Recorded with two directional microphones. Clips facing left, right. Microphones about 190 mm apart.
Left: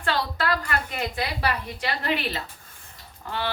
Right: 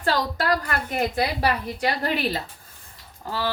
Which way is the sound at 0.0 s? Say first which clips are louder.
Right 2 dB; 40° right (ahead or behind).